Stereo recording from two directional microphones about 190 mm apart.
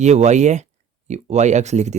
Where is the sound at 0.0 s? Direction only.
35° right (ahead or behind).